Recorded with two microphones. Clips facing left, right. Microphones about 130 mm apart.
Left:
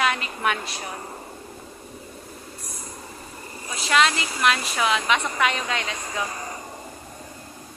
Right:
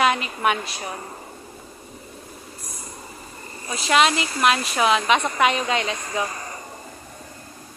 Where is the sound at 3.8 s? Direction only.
20° right (ahead or behind).